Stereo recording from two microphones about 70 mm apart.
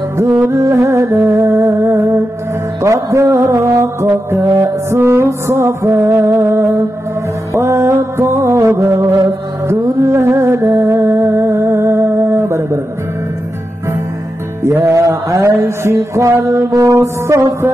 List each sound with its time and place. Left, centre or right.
0.6 s music: right
14.9 s mantra: right